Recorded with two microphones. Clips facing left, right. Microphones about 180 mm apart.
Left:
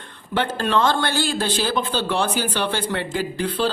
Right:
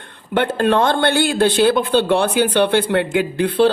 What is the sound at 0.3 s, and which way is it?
Speech, 55° right (ahead or behind).